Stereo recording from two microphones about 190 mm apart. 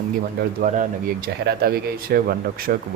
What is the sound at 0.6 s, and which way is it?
Speech, 45° right (ahead or behind).